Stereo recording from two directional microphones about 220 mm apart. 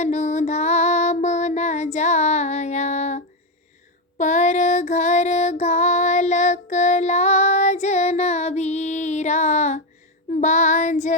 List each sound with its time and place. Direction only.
0.0 s female singing: 30° left (ahead or behind)
4.2 s child singing: 35° left (ahead or behind)